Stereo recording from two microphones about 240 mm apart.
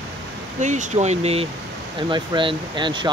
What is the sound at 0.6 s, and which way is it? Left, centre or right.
Speech, right.